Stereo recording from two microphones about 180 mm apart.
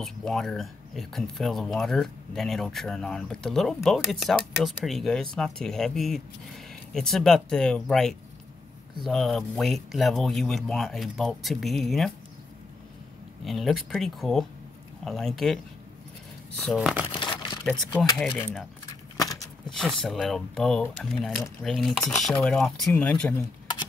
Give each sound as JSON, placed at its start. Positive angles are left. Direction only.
{"t": 0.0, "sound": "speech", "side_deg": 5}
{"t": 13.4, "sound": "speech", "side_deg": 0}
{"t": 17.2, "sound": "crumpling", "side_deg": 25}
{"t": 18.1, "sound": "speech", "side_deg": 5}
{"t": 19.2, "sound": "a sound", "side_deg": 20}
{"t": 19.7, "sound": "speech", "side_deg": 0}